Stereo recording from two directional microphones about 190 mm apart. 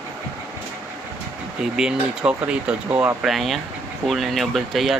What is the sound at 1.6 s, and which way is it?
Speech, 5° right (ahead or behind).